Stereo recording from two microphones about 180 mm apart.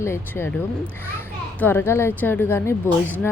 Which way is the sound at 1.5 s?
10° left (ahead or behind).